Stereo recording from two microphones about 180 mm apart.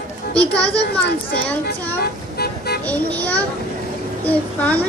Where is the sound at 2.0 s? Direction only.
60° left (ahead or behind).